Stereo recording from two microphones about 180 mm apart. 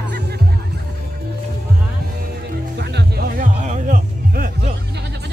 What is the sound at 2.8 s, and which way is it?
Music, 70° right (ahead or behind).